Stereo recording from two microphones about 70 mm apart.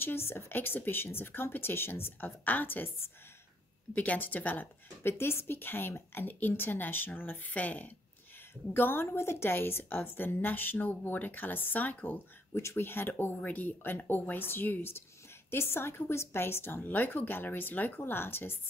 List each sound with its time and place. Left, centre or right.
0.0 s a woman's voice: left
5.1 s a woman's voice: left